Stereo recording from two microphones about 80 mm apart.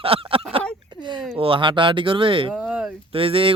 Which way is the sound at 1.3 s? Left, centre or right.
Right.